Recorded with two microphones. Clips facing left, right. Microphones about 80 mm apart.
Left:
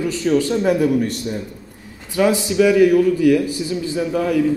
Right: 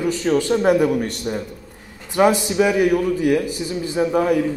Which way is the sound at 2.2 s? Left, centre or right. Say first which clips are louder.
Even; right.